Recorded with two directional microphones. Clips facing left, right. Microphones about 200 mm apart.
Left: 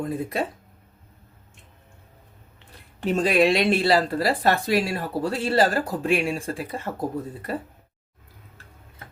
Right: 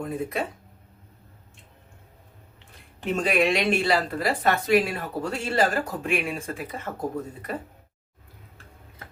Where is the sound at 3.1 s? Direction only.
35° left (ahead or behind).